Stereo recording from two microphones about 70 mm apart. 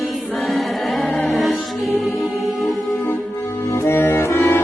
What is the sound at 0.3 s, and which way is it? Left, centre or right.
Music, centre.